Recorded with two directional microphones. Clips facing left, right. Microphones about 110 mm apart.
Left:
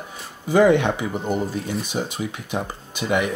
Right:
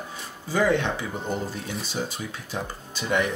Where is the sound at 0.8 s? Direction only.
15° left (ahead or behind).